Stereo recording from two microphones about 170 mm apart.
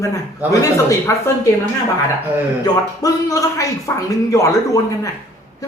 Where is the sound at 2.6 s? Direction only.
20° left (ahead or behind).